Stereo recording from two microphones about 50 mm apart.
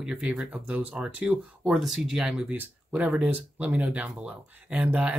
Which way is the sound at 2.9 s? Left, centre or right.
Right.